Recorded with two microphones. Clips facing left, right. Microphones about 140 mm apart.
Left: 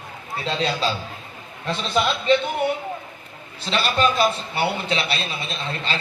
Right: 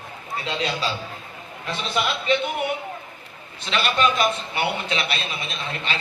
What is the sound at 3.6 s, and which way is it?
A man's voice, 35° left (ahead or behind).